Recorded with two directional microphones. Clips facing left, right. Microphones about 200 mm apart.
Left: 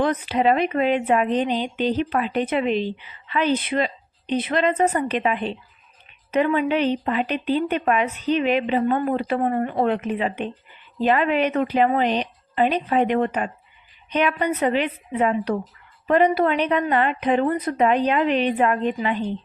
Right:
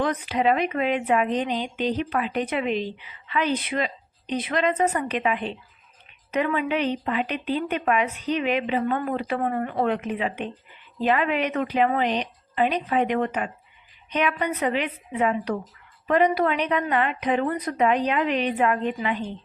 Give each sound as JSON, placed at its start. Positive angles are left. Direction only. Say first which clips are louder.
{"t": 0.0, "sound": "speech", "louder": "left 3 dB", "side_deg": 30}